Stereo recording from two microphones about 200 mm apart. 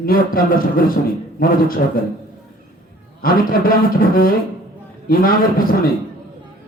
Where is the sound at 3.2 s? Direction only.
45° left (ahead or behind).